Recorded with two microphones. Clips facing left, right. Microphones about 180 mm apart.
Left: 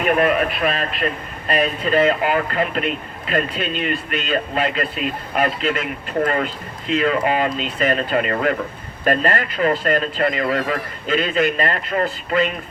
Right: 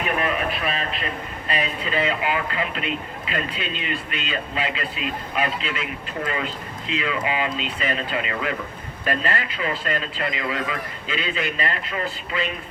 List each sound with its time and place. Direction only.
0.2 s speech: 60° left (ahead or behind)
1.5 s speech: 45° left (ahead or behind)